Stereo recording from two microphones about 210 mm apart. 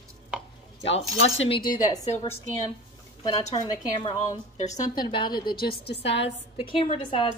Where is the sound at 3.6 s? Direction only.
20° left (ahead or behind).